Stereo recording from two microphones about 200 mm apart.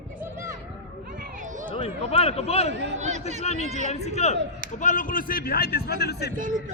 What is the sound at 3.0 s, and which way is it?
Speech, 35° right (ahead or behind).